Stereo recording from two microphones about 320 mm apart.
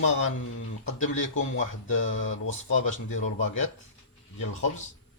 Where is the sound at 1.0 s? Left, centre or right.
Left.